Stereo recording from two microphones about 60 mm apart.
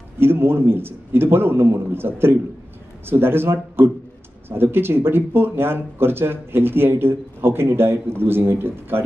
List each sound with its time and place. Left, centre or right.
0.2 s speech: right